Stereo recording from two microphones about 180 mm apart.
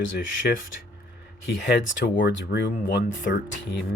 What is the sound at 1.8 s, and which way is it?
Speech, 80° left.